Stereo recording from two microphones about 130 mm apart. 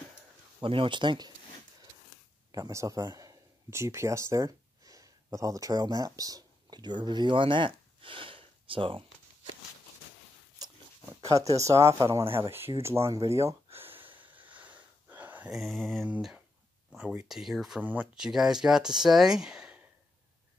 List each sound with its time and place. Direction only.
0.6 s speech: 40° right (ahead or behind)
2.5 s speech: 25° right (ahead or behind); by 9.0 s 45° right (ahead or behind)
11.2 s speech: 25° right (ahead or behind)
13.7 s wheeze: 15° right (ahead or behind)
14.0 s a sound: 40° right (ahead or behind)
14.6 s wheeze: 15° right (ahead or behind)
15.5 s speech: centre (ahead or behind)